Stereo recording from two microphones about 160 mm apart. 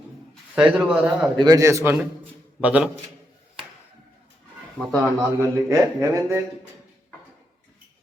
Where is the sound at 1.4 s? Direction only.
20° right (ahead or behind).